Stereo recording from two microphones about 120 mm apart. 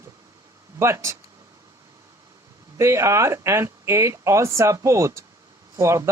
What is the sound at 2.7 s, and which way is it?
Speech, 25° right (ahead or behind).